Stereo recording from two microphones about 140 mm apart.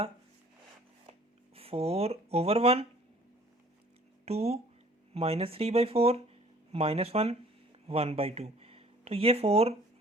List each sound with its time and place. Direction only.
1.5 s speech: 45° right (ahead or behind)
4.3 s speech: 50° right (ahead or behind)